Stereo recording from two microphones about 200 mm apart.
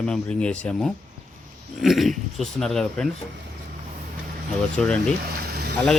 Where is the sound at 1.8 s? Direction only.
Centre (ahead or behind).